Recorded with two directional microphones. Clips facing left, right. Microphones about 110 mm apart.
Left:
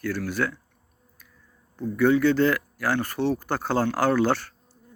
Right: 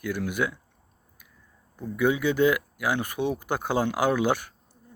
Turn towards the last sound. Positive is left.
turn(degrees=-15)  # may be behind; listen again after turning